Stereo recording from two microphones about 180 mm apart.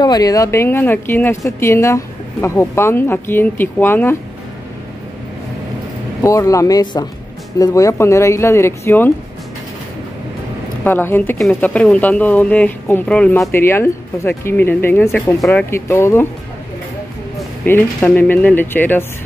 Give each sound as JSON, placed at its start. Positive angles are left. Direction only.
{"t": 0.0, "sound": "speech", "side_deg": 20}
{"t": 6.2, "sound": "speech", "side_deg": 15}
{"t": 10.8, "sound": "speech", "side_deg": 10}
{"t": 17.6, "sound": "speech", "side_deg": 10}